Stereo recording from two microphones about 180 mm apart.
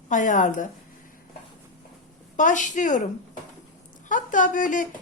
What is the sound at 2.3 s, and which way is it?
Speech, 45° left (ahead or behind).